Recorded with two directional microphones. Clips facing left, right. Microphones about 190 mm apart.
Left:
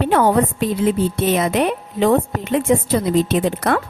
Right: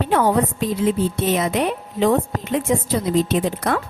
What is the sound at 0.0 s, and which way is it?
A woman's voice, 60° left (ahead or behind).